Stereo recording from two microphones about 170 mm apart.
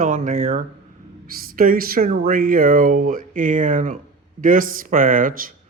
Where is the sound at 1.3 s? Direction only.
60° right (ahead or behind).